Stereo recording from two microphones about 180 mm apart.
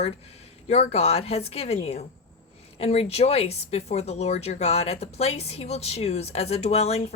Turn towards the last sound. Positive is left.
turn(degrees=35)  # may be behind; listen again after turning